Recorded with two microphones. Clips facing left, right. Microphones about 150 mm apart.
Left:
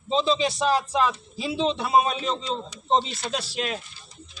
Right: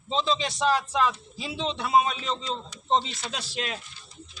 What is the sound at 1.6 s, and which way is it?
Speech, 35° left (ahead or behind).